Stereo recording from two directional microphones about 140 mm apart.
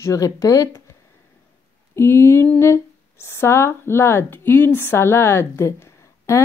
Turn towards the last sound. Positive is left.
turn(degrees=20)  # may be behind; listen again after turning